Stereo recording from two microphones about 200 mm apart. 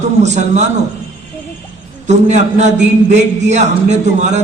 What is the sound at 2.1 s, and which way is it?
A man's voice, 35° right (ahead or behind).